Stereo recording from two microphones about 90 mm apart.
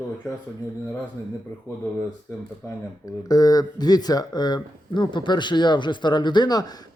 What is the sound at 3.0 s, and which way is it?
Speech, 45° left (ahead or behind).